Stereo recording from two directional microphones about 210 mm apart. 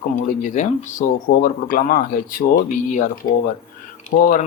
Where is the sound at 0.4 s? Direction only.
35° left (ahead or behind).